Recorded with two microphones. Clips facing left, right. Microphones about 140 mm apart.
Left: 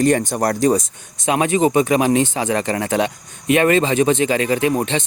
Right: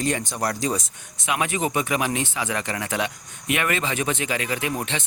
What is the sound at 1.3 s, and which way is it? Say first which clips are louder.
Speech: left 8 dB; 30° left (ahead or behind).